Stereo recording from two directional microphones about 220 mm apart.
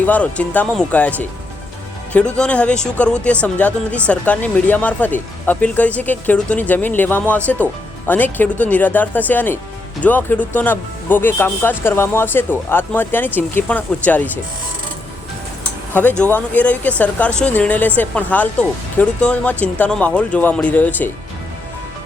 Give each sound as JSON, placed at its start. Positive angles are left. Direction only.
{"t": 0.0, "sound": "speech", "side_deg": 5}
{"t": 15.9, "sound": "speech", "side_deg": 5}